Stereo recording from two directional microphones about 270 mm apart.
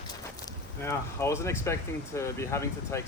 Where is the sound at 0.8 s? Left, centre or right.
Centre.